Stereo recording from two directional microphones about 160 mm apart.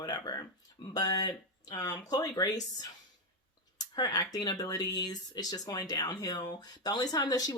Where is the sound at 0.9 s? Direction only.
25° left (ahead or behind).